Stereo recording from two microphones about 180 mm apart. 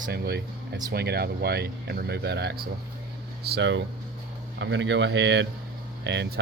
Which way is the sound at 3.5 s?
90° right.